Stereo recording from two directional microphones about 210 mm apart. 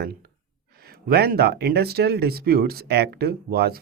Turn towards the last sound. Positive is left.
turn(degrees=-45)  # may be behind; listen again after turning